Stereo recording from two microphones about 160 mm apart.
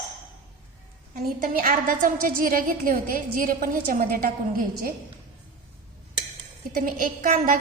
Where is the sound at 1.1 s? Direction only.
60° right (ahead or behind).